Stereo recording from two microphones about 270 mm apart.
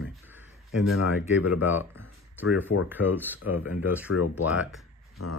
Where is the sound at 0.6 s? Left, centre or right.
Left.